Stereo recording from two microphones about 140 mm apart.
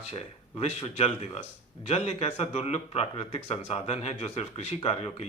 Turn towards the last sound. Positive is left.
turn(degrees=50)  # may be behind; listen again after turning